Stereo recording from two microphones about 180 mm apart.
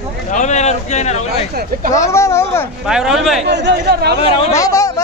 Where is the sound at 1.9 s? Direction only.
15° left (ahead or behind).